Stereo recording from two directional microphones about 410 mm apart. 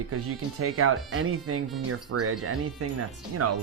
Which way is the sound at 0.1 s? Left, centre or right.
Right.